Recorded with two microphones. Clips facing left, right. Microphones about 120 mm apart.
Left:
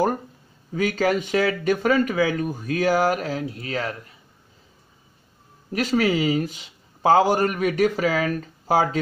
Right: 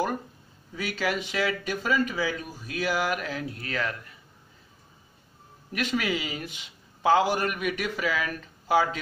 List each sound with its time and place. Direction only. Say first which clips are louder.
0.7 s speech: left 8 dB; 45° left (ahead or behind); by 3.9 s 30° left (ahead or behind)
5.7 s a man's voice: left 7 dB; 35° left (ahead or behind)